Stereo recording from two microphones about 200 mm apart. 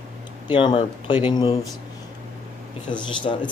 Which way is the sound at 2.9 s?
25° left (ahead or behind).